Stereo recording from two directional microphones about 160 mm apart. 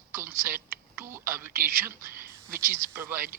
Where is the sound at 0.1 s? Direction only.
15° right (ahead or behind).